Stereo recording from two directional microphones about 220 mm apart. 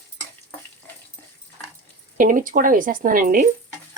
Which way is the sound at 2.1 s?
40° right (ahead or behind).